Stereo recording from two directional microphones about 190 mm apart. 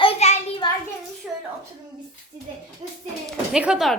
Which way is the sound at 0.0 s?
35° left (ahead or behind).